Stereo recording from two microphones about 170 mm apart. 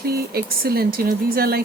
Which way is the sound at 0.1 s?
65° right (ahead or behind).